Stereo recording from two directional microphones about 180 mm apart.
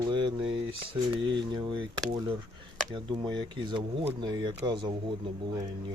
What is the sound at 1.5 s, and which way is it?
Speech, 25° right (ahead or behind).